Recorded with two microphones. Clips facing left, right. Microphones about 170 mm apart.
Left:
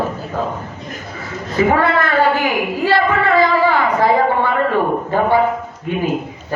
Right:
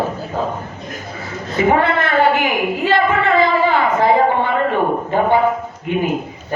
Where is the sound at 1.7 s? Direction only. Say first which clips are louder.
Right 2 dB; 25° right (ahead or behind).